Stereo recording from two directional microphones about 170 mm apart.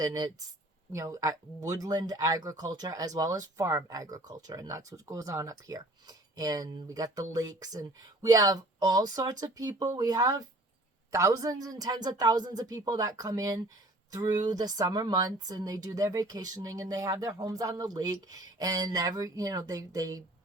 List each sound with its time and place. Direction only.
0.0 s speech: 20° right (ahead or behind)